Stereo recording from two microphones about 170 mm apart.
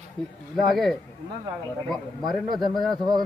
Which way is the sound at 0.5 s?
Centre (ahead or behind).